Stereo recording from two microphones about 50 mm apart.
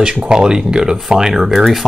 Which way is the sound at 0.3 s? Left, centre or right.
Centre.